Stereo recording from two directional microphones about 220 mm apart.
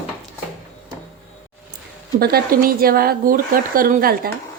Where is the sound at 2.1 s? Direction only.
45° right (ahead or behind).